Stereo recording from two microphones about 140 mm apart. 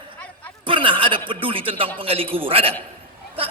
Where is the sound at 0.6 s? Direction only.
35° right (ahead or behind).